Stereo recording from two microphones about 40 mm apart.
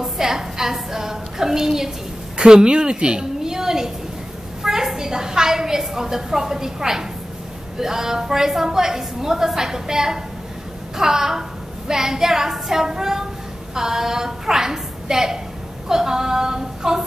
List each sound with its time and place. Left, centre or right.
0.0 s a woman's voice: centre